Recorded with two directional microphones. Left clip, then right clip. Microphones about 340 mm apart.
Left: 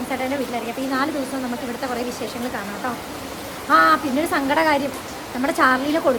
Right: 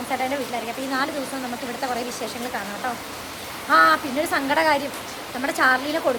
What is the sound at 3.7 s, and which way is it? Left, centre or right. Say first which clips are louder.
Speech: left 1 dB; centre.